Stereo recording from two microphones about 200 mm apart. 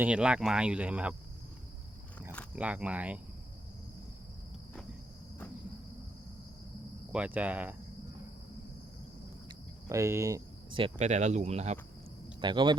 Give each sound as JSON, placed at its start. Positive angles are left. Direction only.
{"t": 0.0, "sound": "speech", "side_deg": -5}
{"t": 2.6, "sound": "speech", "side_deg": -5}
{"t": 7.1, "sound": "speech", "side_deg": -5}
{"t": 9.9, "sound": "speech", "side_deg": -15}
{"t": 12.4, "sound": "speech", "side_deg": -25}